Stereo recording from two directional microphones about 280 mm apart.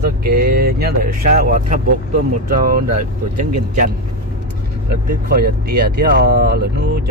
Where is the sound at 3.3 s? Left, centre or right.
Right.